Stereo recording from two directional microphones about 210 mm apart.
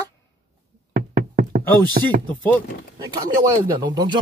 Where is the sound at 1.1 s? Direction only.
40° right (ahead or behind).